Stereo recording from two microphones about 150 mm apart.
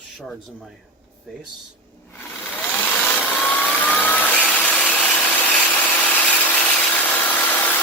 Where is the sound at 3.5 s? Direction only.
10° left (ahead or behind).